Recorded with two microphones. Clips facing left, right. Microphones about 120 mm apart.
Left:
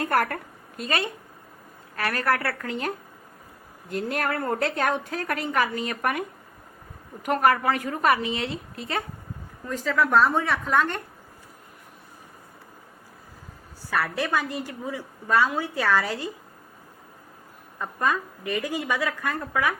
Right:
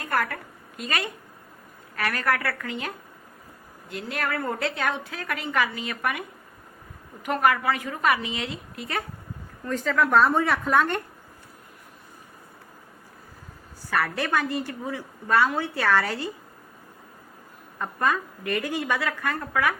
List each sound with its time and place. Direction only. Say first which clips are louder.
0.0 s speech: left 3 dB; 50° left (ahead or behind)
0.8 s a woman's voice: left 2 dB; 30° left (ahead or behind)
9.6 s a woman's voice: right 1 dB; 5° left (ahead or behind)
14.0 s a woman's voice: even; 10° left (ahead or behind)
17.7 s a woman's voice: even; 15° left (ahead or behind)